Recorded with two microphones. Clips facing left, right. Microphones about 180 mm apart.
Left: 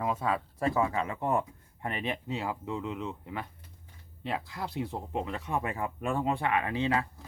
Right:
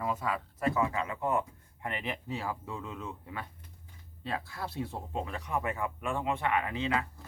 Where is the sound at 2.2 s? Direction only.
20° left (ahead or behind).